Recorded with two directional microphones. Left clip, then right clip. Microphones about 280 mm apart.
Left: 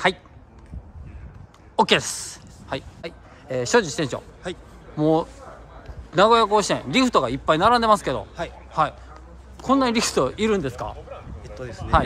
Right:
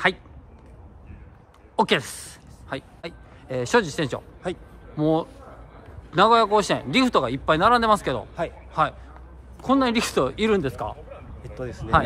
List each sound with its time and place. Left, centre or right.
1.8 s speech: centre
4.4 s speech: right
4.9 s speech: centre
11.4 s a man's voice: right